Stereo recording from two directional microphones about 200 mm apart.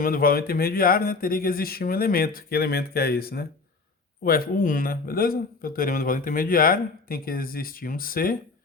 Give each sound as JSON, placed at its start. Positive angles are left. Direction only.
{"t": 0.0, "sound": "speech", "side_deg": 45}